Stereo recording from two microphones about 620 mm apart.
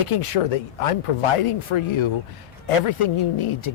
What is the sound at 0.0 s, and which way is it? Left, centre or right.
Speech, left.